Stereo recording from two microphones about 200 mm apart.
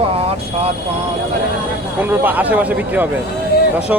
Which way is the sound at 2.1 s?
10° right (ahead or behind).